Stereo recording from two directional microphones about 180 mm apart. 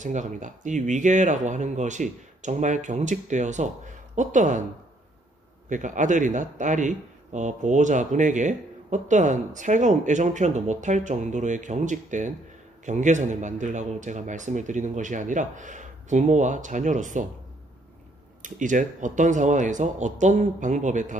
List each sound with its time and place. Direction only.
0.0 s a man's voice: 45° right (ahead or behind)
5.7 s a man's voice: 45° right (ahead or behind)
18.4 s a man's voice: 45° right (ahead or behind)